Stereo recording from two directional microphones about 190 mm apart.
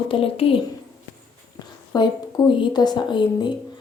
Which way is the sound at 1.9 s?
25° left (ahead or behind).